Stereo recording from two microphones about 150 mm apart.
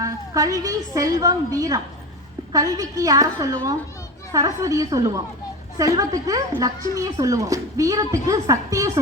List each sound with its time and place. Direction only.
0.0 s a woman's voice: 25° right (ahead or behind)